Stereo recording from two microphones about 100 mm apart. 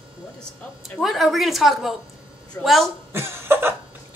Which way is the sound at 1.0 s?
Centre (ahead or behind).